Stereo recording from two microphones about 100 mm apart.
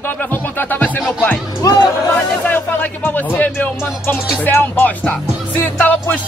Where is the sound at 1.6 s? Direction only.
40° left (ahead or behind).